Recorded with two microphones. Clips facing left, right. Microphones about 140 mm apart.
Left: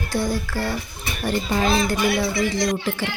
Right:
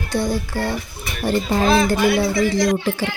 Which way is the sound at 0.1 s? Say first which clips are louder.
Right 3 dB; 20° right (ahead or behind).